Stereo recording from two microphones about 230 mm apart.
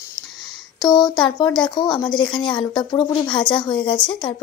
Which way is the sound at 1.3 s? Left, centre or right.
Centre.